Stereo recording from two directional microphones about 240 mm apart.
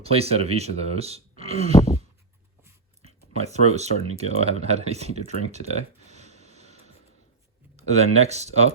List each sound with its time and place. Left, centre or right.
0.0 s speech: right
3.0 s speech: right
6.1 s a sound: right
7.8 s speech: right